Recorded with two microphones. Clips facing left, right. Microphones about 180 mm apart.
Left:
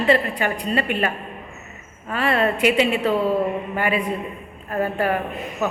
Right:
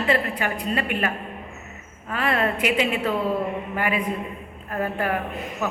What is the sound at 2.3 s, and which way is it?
Speech, 10° right (ahead or behind).